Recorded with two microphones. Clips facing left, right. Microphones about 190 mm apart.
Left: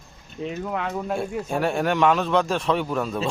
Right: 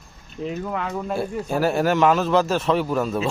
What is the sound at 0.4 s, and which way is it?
Speech, centre (ahead or behind).